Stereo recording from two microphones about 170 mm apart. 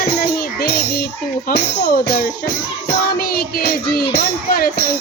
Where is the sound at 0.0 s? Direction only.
65° left (ahead or behind).